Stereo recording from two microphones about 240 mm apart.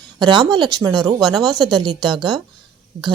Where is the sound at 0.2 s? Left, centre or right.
Centre.